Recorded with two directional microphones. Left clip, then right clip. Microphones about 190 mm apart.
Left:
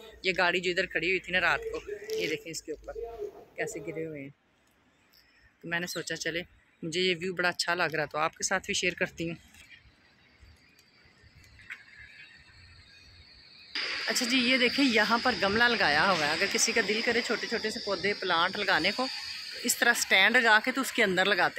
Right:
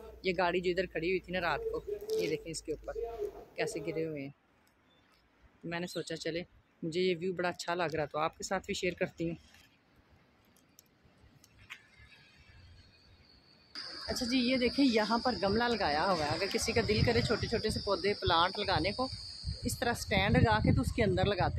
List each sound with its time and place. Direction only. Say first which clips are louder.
0.0 s speech: left 5 dB; centre (ahead or behind)
5.9 s speech: left 4 dB; 5° right (ahead or behind)
13.7 s speech: left 9 dB; 5° right (ahead or behind)